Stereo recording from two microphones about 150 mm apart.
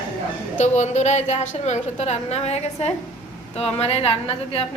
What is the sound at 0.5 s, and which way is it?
A woman's voice, 50° left (ahead or behind).